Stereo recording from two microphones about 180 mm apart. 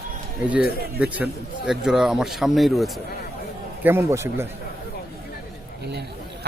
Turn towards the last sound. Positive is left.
turn(degrees=-65)  # may be behind; listen again after turning